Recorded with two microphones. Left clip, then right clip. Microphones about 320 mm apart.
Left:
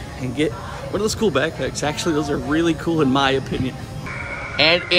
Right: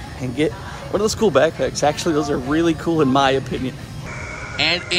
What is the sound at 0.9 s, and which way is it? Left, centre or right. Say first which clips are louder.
Speech: right 4 dB; centre.